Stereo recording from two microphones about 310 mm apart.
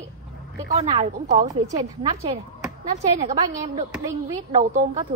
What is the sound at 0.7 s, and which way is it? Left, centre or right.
Speech, right.